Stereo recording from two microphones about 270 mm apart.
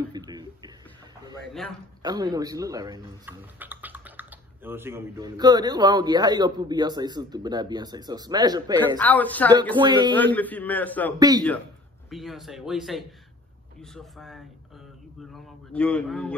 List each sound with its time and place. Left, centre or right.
0.0 s a sound: centre
2.0 s speech: centre
8.7 s speech: centre
9.8 s speech: centre
10.1 s a man's voice: centre
11.1 s speech: centre
12.1 s a man's voice: centre